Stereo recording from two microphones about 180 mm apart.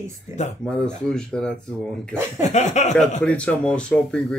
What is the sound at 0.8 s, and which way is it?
Speech, 5° left (ahead or behind).